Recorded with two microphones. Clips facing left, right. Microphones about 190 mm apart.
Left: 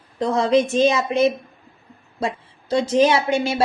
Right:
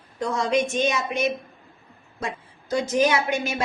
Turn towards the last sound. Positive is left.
turn(degrees=30)  # may be behind; listen again after turning